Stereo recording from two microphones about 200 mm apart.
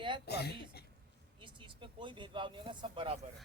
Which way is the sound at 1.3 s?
25° right (ahead or behind).